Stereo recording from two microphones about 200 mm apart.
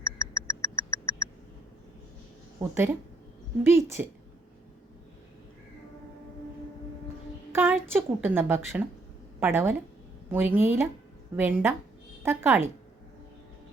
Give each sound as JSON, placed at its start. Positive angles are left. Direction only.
{"t": 0.2, "sound": "a sound", "side_deg": 15}
{"t": 2.6, "sound": "speech", "side_deg": -10}
{"t": 7.5, "sound": "a woman's voice", "side_deg": -10}